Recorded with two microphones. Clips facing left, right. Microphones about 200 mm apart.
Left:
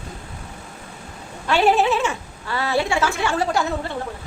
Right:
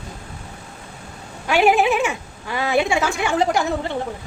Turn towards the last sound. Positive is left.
turn(degrees=-15)  # may be behind; listen again after turning